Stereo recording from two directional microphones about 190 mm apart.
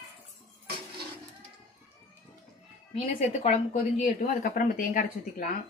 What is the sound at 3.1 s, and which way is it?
A woman's voice, 40° left (ahead or behind).